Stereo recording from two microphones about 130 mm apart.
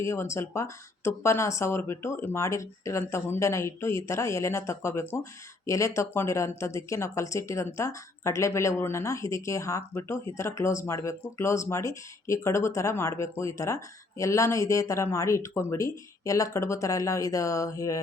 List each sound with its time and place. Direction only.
0.0 s speech: 20° left (ahead or behind)